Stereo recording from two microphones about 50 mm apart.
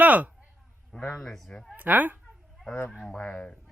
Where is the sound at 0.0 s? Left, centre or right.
Right.